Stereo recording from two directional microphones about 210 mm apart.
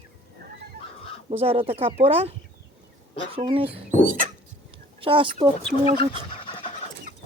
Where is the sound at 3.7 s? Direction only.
40° right (ahead or behind).